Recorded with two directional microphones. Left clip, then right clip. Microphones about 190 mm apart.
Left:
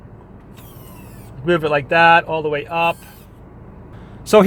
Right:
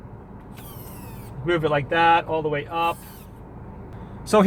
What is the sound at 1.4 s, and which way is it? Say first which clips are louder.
Speech: left 5 dB; 55° left (ahead or behind).